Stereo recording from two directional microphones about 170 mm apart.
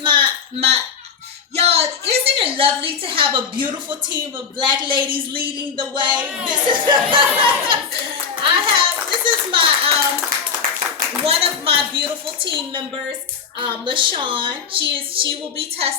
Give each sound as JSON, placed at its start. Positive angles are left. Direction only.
{"t": 0.0, "sound": "a sound", "side_deg": -30}
{"t": 2.4, "sound": "a woman's voice", "side_deg": -30}
{"t": 11.2, "sound": "a woman's voice", "side_deg": -35}